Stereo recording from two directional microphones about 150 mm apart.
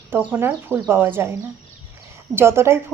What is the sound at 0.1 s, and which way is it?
Speech, 10° right (ahead or behind).